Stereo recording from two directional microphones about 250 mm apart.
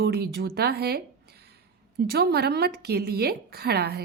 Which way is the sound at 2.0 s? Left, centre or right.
Right.